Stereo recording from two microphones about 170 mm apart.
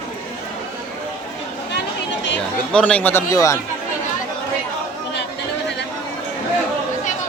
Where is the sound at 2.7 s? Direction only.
5° left (ahead or behind).